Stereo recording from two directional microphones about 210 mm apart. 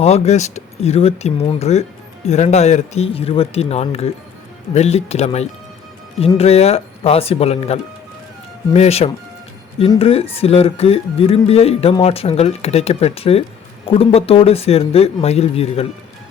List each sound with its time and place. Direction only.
0.0 s speech: 30° left (ahead or behind)